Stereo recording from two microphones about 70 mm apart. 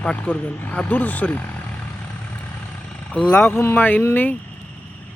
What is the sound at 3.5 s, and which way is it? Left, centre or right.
Speech, left.